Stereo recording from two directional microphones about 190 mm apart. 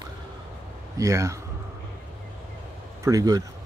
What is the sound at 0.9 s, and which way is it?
Speech, 15° right (ahead or behind).